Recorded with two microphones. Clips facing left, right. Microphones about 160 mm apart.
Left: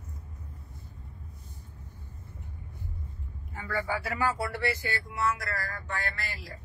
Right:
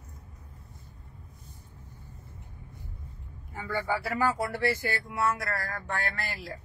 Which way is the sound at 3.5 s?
25° right (ahead or behind).